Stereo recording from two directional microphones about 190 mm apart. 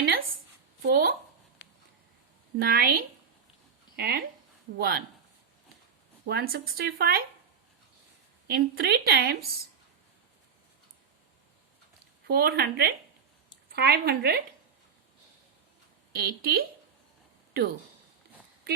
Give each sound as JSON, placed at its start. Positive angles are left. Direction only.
{"t": 0.8, "sound": "speech", "side_deg": -55}
{"t": 2.6, "sound": "a woman's voice", "side_deg": -55}
{"t": 6.2, "sound": "speech", "side_deg": -55}
{"t": 8.4, "sound": "speech", "side_deg": -55}
{"t": 12.3, "sound": "speech", "side_deg": -55}
{"t": 16.1, "sound": "speech", "side_deg": -55}